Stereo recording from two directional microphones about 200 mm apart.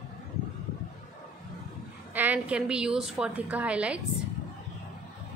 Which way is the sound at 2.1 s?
10° right (ahead or behind).